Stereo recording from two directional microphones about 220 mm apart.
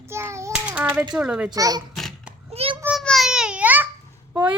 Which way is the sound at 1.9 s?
Centre (ahead or behind).